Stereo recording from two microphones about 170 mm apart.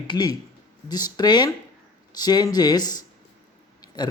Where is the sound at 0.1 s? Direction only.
25° left (ahead or behind).